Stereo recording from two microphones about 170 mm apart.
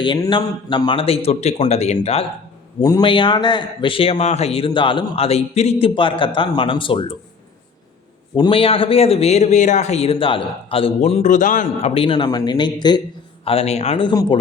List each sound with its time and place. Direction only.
0.0 s a man's voice: 25° left (ahead or behind)
2.8 s speech: 25° left (ahead or behind)
8.4 s a man's voice: 30° left (ahead or behind)